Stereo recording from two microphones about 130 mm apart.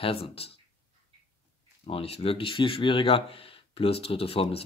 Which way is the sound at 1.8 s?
50° left (ahead or behind).